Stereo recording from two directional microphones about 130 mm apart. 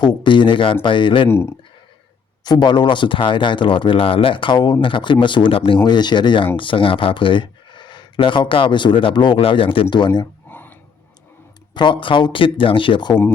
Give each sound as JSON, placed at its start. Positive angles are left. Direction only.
{"t": 0.0, "sound": "speech", "side_deg": 35}
{"t": 1.3, "sound": "speech", "side_deg": 20}
{"t": 2.4, "sound": "speech", "side_deg": 35}
{"t": 10.5, "sound": "a sound", "side_deg": 15}
{"t": 11.7, "sound": "speech", "side_deg": 35}